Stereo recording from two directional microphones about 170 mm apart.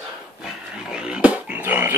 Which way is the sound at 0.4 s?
5° right (ahead or behind).